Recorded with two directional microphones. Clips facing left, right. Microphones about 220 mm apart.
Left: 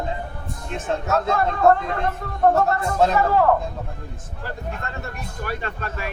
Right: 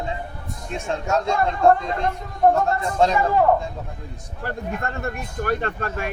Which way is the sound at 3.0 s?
5° left (ahead or behind).